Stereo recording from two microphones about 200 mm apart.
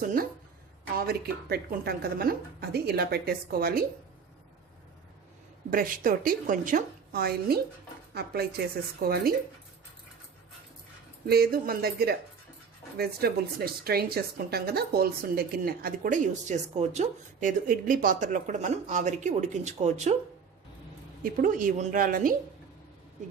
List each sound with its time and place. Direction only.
0.0 s a woman's voice: 45° right (ahead or behind)
5.7 s a woman's voice: 45° right (ahead or behind)
11.3 s a woman's voice: 50° right (ahead or behind)
21.4 s a woman's voice: 40° right (ahead or behind)